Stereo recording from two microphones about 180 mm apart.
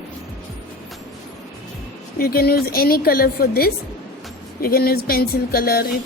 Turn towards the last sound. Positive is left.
turn(degrees=60)  # may be behind; listen again after turning